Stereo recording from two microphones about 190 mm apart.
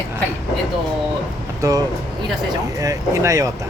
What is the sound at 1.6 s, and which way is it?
Speech, 20° right (ahead or behind).